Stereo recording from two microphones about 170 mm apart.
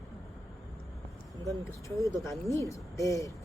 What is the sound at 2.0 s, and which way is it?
Speech, 20° left (ahead or behind).